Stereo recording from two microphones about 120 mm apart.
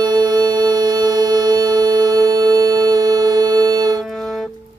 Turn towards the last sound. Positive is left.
turn(degrees=5)  # may be behind; listen again after turning